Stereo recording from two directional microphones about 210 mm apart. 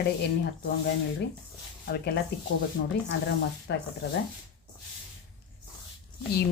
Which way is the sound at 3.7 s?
50° left (ahead or behind).